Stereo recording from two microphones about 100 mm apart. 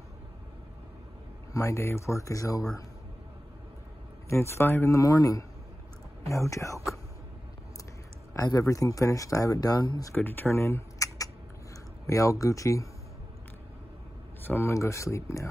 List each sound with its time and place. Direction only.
1.5 s speech: 30° left (ahead or behind)
4.3 s speech: 25° left (ahead or behind)
8.3 s speech: 35° left (ahead or behind)
10.1 s speech: 20° left (ahead or behind)
14.4 s speech: 25° left (ahead or behind)